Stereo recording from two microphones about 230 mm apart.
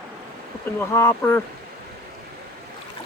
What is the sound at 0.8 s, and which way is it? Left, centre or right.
Speech, centre.